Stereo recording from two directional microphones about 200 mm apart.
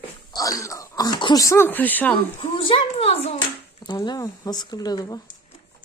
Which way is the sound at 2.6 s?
30° left (ahead or behind).